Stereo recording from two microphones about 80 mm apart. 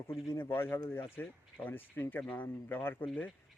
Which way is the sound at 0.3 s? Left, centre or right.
Left.